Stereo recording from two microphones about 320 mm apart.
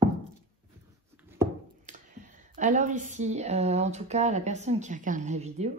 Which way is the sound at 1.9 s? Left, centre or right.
Right.